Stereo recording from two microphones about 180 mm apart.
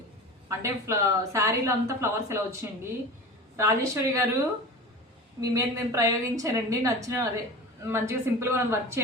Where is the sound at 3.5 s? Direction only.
15° right (ahead or behind).